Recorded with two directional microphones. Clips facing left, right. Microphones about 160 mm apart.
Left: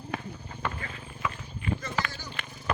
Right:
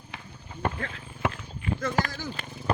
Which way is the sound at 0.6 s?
50° right (ahead or behind).